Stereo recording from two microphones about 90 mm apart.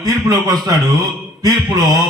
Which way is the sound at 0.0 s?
45° right (ahead or behind).